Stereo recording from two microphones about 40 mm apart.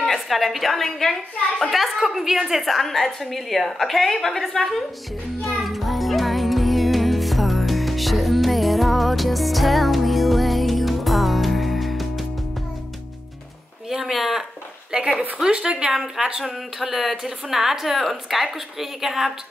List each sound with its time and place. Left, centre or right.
0.0 s a woman's voice: centre
5.4 s music: centre
13.8 s a sound: centre
14.9 s a woman's voice: right
15.9 s a woman's voice: centre